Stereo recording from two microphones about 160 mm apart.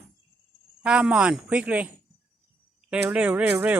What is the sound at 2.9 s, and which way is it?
Speech, 5° right (ahead or behind).